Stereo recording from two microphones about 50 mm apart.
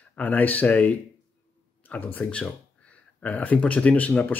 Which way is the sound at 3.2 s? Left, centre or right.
Left.